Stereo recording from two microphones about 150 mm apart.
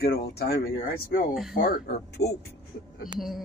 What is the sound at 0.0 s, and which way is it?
Speech, 90° left.